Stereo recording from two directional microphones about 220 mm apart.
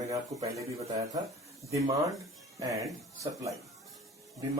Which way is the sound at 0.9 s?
15° right (ahead or behind).